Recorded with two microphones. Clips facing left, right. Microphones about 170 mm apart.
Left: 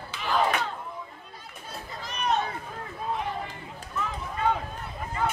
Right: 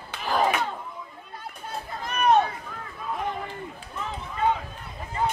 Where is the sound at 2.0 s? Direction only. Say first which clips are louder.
Right 7 dB; 55° right (ahead or behind).